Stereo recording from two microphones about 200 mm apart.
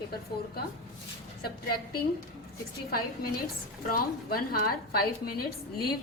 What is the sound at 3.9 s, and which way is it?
A woman's voice, 45° left (ahead or behind).